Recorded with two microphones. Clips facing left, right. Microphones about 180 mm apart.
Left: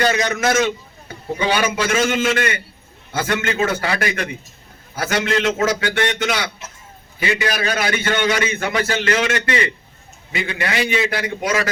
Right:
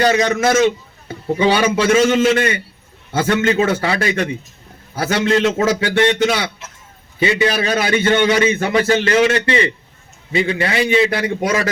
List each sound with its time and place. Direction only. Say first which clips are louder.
0.0 s a man's voice: right 4 dB; 25° right (ahead or behind)